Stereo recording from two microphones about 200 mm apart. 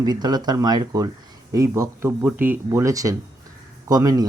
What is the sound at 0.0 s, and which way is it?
Speech, 20° right (ahead or behind).